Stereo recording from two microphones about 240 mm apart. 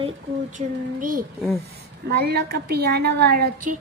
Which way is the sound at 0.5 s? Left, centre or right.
Right.